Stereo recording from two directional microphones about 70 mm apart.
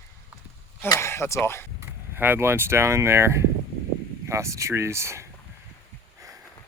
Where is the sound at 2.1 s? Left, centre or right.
Right.